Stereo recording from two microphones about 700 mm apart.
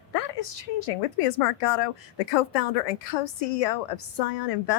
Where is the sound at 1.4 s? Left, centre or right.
Left.